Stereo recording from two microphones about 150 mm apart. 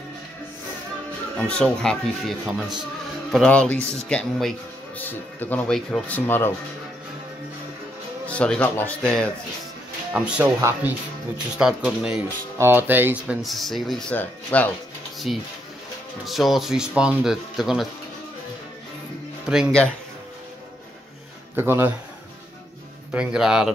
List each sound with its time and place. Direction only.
1.3 s speech: 10° left (ahead or behind)
8.3 s speech: 10° left (ahead or behind)
10.1 s speech: 5° right (ahead or behind); by 14.7 s 10° left (ahead or behind)
15.3 s speech: 5° right (ahead or behind)
19.4 s speech: 5° right (ahead or behind)
21.5 s speech: 15° right (ahead or behind)
23.1 s speech: 5° right (ahead or behind)